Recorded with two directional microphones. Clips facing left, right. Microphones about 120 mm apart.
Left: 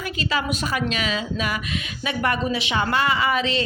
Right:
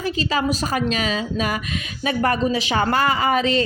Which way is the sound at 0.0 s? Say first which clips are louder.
Right 4 dB; 35° right (ahead or behind).